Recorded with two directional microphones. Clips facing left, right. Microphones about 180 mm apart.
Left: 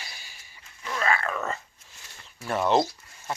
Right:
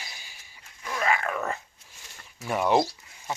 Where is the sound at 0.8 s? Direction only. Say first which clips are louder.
Even; 15° right (ahead or behind).